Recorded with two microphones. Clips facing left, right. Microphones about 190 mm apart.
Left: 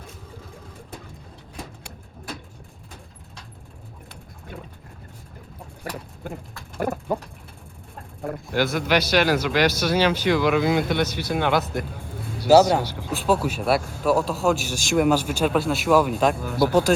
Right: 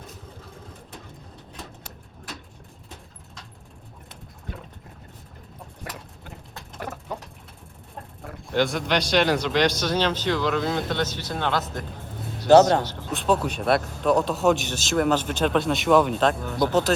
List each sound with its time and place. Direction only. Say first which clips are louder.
6.7 s speech: left 9 dB; 50° left (ahead or behind)
8.4 s a man's voice: even; 5° left (ahead or behind)
14.8 s a man's voice: left 2 dB; 10° left (ahead or behind)